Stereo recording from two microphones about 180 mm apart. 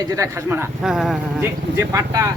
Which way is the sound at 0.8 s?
Centre (ahead or behind).